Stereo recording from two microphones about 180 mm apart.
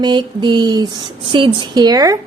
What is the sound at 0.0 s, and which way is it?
Speech, 25° right (ahead or behind).